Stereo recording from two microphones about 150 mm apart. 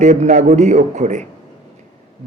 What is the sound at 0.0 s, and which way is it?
A man's voice, 55° right (ahead or behind).